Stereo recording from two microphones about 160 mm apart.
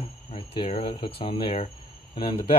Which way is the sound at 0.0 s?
35° left (ahead or behind).